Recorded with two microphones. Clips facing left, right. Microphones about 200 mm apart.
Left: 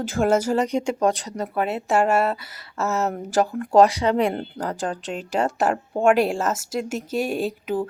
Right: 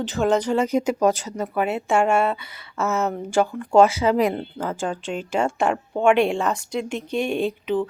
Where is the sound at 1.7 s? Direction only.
Centre (ahead or behind).